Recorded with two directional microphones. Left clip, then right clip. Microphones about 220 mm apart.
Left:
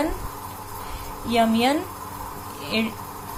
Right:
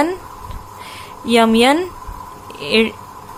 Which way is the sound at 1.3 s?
35° right (ahead or behind).